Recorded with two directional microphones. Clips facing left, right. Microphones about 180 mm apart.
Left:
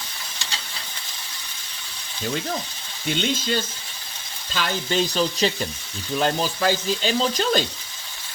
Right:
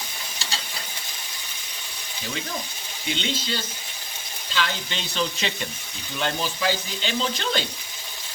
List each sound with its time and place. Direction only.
3.1 s frying: 50° left (ahead or behind)
4.5 s frying: 45° left (ahead or behind)
6.1 s speech: 40° left (ahead or behind)